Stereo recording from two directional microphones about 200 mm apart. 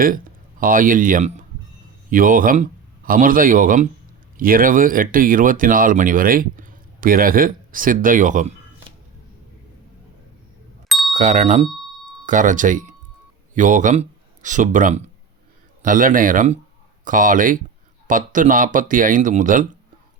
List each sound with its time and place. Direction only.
0.6 s speech: 45° right (ahead or behind)
10.8 s bicycle bell: centre (ahead or behind)
11.1 s speech: 40° right (ahead or behind)